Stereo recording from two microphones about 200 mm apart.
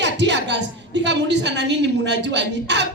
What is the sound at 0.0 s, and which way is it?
Music, 60° right (ahead or behind).